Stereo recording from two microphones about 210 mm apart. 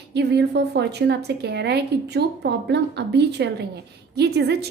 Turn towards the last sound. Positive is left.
turn(degrees=-50)  # may be behind; listen again after turning